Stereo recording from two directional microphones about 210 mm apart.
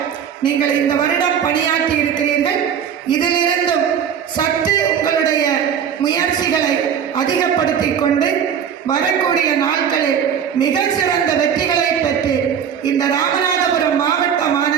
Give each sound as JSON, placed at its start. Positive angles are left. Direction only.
{"t": 3.1, "sound": "music", "side_deg": 20}
{"t": 9.6, "sound": "music", "side_deg": 20}